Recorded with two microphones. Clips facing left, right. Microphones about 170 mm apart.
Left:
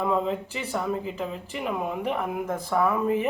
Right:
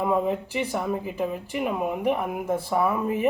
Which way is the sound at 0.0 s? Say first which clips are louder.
Right 2 dB; 15° right (ahead or behind).